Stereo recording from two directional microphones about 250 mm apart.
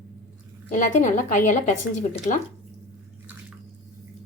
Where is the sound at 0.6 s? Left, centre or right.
Left.